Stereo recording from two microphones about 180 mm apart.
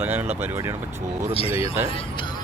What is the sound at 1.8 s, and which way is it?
Speech, 30° left (ahead or behind).